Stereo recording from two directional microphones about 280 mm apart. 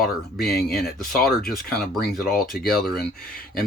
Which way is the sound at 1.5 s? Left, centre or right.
Centre.